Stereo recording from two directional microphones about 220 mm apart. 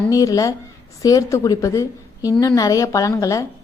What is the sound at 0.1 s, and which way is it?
A woman's voice, 15° left (ahead or behind).